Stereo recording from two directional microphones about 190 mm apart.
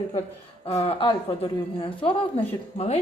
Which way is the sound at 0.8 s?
30° left (ahead or behind).